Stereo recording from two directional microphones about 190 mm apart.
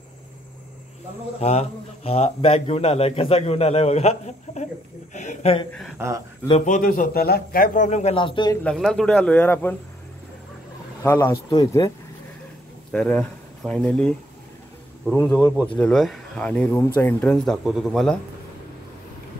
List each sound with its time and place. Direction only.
1.4 s a man's voice: 35° left (ahead or behind)
5.9 s speech: 15° right (ahead or behind)
6.6 s a man's voice: 45° left (ahead or behind); by 8.5 s 25° left (ahead or behind)
8.6 s speech: centre (ahead or behind)
11.0 s speech: 15° left (ahead or behind)
12.9 s speech: 5° left (ahead or behind)
15.5 s speech: 5° left (ahead or behind)